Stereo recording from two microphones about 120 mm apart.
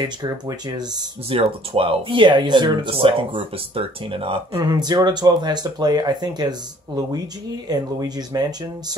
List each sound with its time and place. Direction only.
0.0 s speech: 35° right (ahead or behind)
1.3 s speech: 50° right (ahead or behind)
2.9 s speech: 50° right (ahead or behind)
4.6 s speech: 35° right (ahead or behind)